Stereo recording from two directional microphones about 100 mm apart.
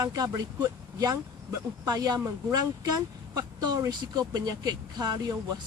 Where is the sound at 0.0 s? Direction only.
35° right (ahead or behind).